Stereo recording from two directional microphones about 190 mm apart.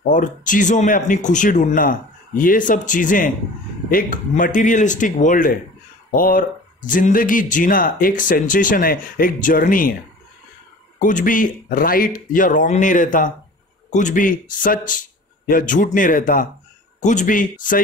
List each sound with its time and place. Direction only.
0.1 s speech: 45° left (ahead or behind)
11.0 s speech: 45° left (ahead or behind)